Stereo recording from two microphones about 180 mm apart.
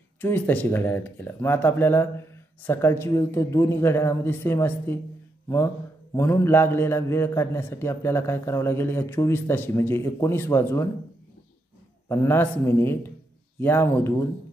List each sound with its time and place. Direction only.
0.2 s speech: 10° left (ahead or behind)
6.1 s speech: 15° left (ahead or behind)
12.1 s speech: 15° left (ahead or behind)